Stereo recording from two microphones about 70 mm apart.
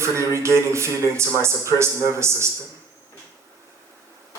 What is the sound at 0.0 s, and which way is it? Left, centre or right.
Speech, right.